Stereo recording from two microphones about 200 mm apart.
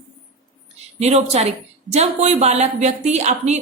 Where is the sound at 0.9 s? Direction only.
35° right (ahead or behind).